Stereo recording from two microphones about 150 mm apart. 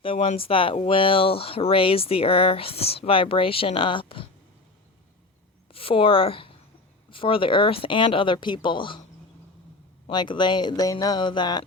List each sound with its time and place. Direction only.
0.0 s speech: 40° left (ahead or behind)
5.7 s a woman's voice: 35° left (ahead or behind)
10.1 s speech: 30° left (ahead or behind)